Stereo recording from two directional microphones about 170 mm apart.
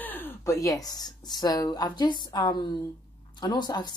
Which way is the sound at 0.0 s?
10° left (ahead or behind).